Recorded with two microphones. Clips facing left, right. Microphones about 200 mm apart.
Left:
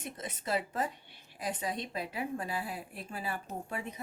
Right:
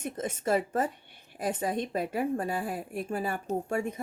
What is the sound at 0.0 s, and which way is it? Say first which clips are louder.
A woman's voice: right 8 dB; 50° right (ahead or behind).